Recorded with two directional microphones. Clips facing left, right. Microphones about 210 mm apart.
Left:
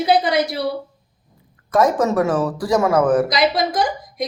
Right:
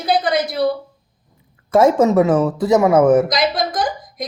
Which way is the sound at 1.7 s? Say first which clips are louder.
Right 4 dB; 25° right (ahead or behind).